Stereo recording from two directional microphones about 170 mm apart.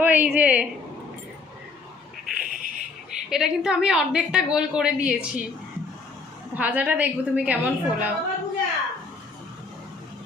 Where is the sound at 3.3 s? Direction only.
5° right (ahead or behind).